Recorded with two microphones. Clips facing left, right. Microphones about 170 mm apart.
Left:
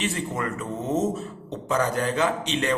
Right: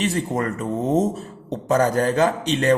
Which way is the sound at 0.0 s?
40° right (ahead or behind).